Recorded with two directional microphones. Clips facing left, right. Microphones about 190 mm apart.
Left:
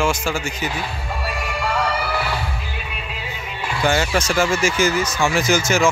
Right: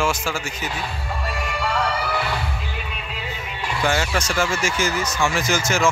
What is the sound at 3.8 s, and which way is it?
Speech, centre (ahead or behind).